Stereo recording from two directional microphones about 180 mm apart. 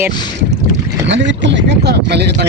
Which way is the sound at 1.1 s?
85° right.